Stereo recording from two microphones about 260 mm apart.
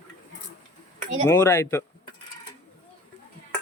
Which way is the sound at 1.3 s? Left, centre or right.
Centre.